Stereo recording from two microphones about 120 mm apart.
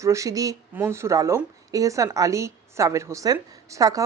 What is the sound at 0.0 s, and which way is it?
A woman's voice, 25° right (ahead or behind).